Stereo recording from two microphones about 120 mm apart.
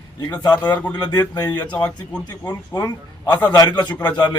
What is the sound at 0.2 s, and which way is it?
Speech, 35° left (ahead or behind).